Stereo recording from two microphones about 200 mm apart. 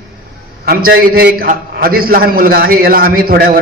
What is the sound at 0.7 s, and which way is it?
A man's voice, 50° right (ahead or behind).